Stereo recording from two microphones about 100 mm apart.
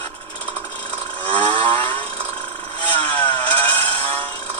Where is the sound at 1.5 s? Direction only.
60° right (ahead or behind).